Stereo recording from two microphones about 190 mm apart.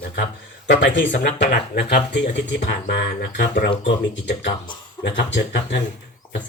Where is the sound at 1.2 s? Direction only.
65° left (ahead or behind).